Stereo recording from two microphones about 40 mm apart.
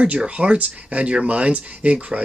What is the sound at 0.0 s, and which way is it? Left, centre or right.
Speech, right.